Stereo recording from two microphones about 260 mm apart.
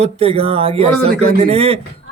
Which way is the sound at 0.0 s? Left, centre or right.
Right.